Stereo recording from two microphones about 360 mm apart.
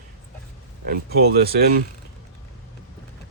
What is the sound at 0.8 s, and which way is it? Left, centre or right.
Speech, right.